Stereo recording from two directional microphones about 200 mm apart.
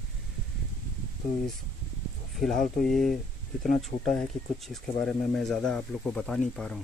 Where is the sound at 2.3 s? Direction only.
Centre (ahead or behind).